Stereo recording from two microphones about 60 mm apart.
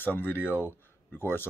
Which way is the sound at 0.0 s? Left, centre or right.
Left.